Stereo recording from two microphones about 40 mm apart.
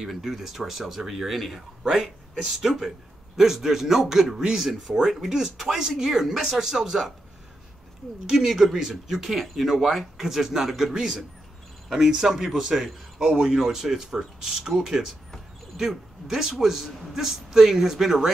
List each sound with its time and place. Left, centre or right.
0.0 s a man's voice: centre
8.5 s a man's voice: centre